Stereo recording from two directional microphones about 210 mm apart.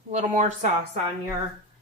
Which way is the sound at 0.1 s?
35° right (ahead or behind).